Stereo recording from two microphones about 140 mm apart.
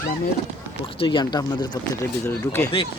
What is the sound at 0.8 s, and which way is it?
Speech, 40° left (ahead or behind).